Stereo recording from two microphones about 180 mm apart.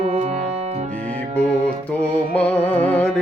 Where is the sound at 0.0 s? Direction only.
35° right (ahead or behind).